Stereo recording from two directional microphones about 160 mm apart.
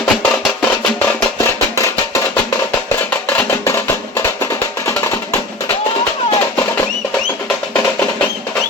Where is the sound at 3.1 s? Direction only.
10° left (ahead or behind).